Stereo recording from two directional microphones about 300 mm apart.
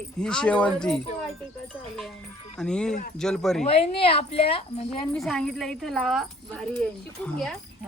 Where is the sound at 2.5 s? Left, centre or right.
Centre.